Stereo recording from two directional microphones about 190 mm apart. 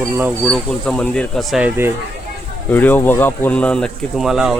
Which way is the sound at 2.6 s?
10° left (ahead or behind).